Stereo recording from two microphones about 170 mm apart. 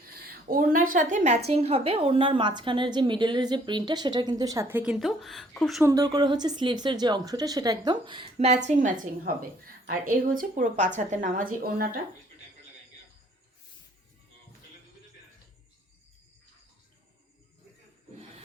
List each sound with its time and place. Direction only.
0.2 s a woman's voice: 55° right (ahead or behind); by 4.8 s 20° right (ahead or behind)
4.8 s speech: 5° right (ahead or behind)
5.8 s a woman's voice: 20° right (ahead or behind); by 11.9 s 60° right (ahead or behind)